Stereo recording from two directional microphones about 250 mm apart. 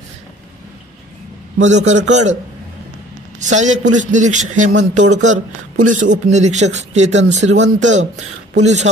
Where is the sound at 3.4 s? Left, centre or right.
Right.